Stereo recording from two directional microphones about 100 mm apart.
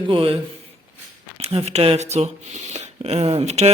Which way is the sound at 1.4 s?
85° right.